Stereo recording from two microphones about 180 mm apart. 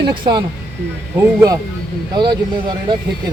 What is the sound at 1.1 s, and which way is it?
Speech, 15° right (ahead or behind).